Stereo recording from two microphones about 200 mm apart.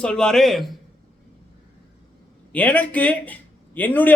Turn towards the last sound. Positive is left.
turn(degrees=10)  # may be behind; listen again after turning